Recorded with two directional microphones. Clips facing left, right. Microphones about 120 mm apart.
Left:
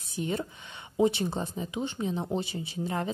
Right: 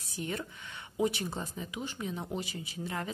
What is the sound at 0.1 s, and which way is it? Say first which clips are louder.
Speech: left 5 dB; 25° left (ahead or behind).